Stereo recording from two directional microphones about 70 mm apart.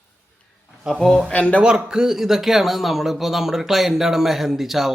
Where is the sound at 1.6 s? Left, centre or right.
Centre.